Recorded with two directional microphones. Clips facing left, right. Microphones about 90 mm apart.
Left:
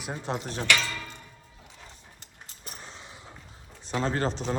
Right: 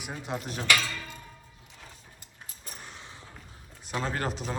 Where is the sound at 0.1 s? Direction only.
30° left (ahead or behind).